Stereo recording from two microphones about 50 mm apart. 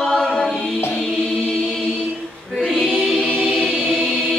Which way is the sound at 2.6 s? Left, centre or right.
Centre.